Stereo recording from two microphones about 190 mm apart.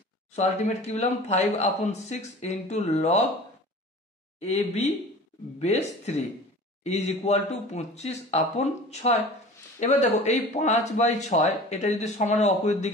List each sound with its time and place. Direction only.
0.4 s speech: 35° left (ahead or behind)
4.4 s speech: 35° left (ahead or behind)